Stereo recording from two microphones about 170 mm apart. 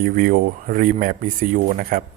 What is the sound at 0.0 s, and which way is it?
Speech, 55° right (ahead or behind).